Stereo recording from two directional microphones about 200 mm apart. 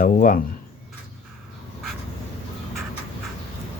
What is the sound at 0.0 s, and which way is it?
Speech, 40° left (ahead or behind).